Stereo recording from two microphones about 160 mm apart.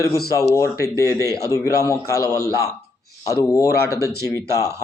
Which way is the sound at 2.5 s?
15° right (ahead or behind).